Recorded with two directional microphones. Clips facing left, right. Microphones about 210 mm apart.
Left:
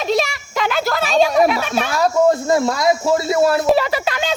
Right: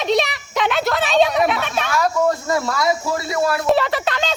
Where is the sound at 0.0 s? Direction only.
Centre (ahead or behind).